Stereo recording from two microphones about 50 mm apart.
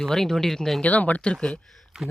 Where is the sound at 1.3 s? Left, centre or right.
Centre.